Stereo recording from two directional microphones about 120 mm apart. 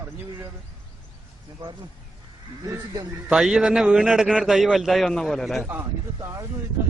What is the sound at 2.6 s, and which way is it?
Speech, 25° right (ahead or behind).